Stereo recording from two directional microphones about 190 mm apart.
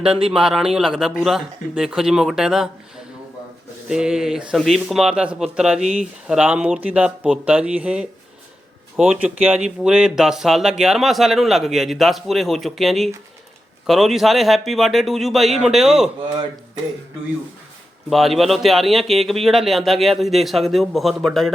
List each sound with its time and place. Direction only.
0.0 s speech: 30° right (ahead or behind)
0.3 s speech: 5° right (ahead or behind)
3.8 s speech: 5° right (ahead or behind)
18.1 s speech: centre (ahead or behind)